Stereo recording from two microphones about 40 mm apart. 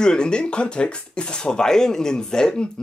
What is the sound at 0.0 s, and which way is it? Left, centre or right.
Speech, left.